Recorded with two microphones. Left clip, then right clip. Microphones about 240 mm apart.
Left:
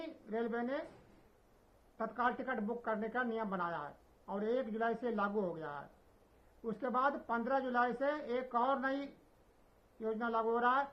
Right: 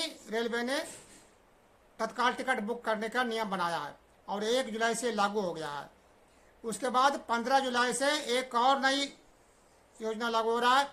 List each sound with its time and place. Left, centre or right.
0.0 s a woman's voice: right
2.0 s a woman's voice: right